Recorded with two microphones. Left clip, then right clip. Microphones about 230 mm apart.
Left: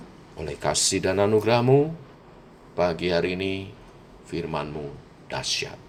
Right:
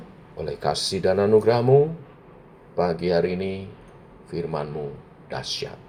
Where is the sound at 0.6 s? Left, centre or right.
Left.